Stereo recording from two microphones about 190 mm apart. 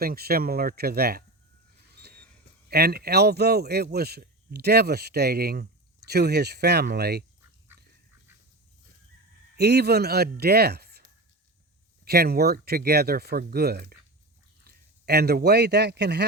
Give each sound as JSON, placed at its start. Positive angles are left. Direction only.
{"t": 0.0, "sound": "speech", "side_deg": -55}
{"t": 2.0, "sound": "a sound", "side_deg": -55}
{"t": 2.6, "sound": "speech", "side_deg": -55}
{"t": 9.6, "sound": "speech", "side_deg": -60}
{"t": 12.0, "sound": "a man's voice", "side_deg": -55}